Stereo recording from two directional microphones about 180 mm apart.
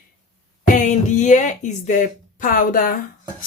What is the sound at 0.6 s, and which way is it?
Speech, 45° left (ahead or behind).